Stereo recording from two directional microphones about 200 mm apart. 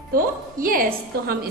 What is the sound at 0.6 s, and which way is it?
Speech, 45° right (ahead or behind).